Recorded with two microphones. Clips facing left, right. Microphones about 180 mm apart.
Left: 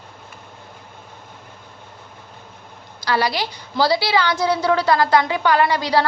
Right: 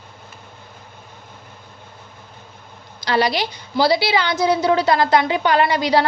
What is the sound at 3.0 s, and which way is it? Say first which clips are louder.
A woman's voice: right 2 dB; 20° right (ahead or behind).